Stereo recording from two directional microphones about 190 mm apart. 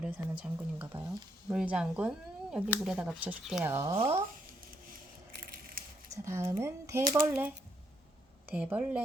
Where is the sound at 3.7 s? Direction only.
20° right (ahead or behind).